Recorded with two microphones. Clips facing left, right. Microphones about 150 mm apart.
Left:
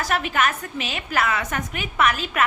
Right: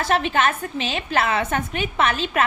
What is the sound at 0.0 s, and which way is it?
A woman's voice, 25° right (ahead or behind).